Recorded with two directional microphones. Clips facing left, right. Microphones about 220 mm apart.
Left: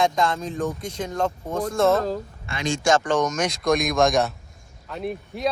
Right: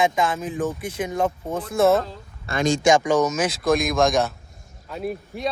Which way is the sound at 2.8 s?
10° right (ahead or behind).